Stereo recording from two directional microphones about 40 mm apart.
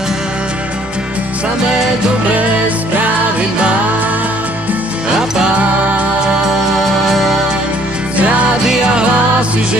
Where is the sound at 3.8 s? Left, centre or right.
Right.